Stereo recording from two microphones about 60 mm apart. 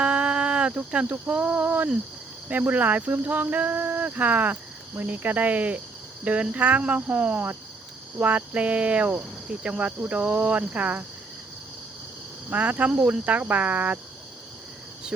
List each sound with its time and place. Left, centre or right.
0.0 s a sound: right
1.0 s cricket: right
12.5 s cricket: right